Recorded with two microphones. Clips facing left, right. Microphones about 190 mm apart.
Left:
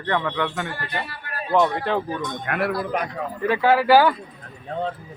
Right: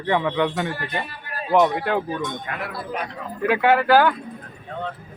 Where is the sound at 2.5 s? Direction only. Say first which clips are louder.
Left 7 dB; 60° left (ahead or behind).